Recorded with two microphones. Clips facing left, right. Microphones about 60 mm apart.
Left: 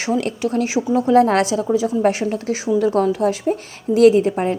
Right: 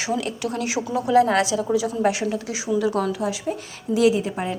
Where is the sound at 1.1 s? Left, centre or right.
Left.